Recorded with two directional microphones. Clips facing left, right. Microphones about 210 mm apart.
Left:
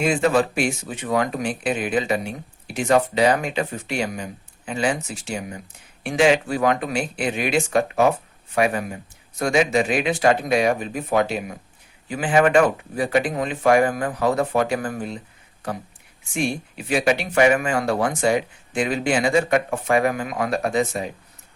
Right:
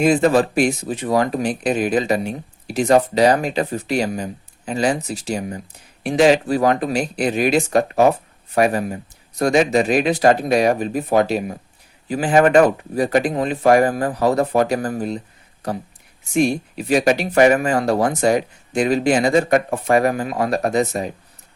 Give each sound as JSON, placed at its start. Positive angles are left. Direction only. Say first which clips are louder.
{"t": 0.0, "sound": "speech", "louder": "right 4 dB", "side_deg": -40}